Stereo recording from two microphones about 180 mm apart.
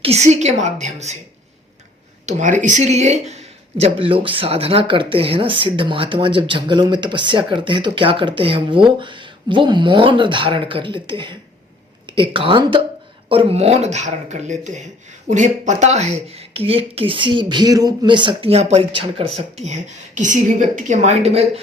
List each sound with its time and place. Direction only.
0.0 s speech: 35° right (ahead or behind)
2.2 s speech: 45° right (ahead or behind)
19.6 s speech: 40° right (ahead or behind)